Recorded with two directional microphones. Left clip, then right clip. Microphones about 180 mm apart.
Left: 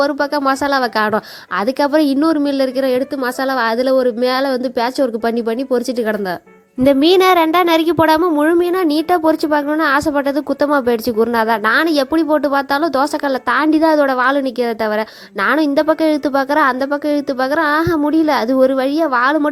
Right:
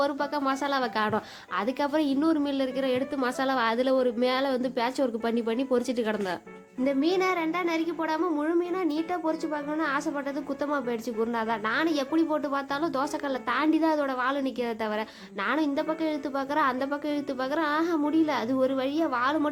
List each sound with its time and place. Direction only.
0.0 s a woman's voice: 40° left (ahead or behind)
6.8 s a child's voice: 50° left (ahead or behind)